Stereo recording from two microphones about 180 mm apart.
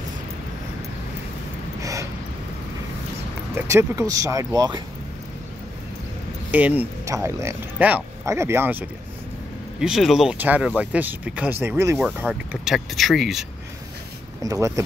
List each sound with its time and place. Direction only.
1.8 s a sound: 15° right (ahead or behind)
3.5 s speech: 15° right (ahead or behind)
6.5 s speech: 10° right (ahead or behind)
14.4 s speech: 20° right (ahead or behind)